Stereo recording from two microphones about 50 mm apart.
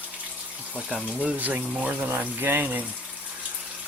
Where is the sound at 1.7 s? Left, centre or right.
Centre.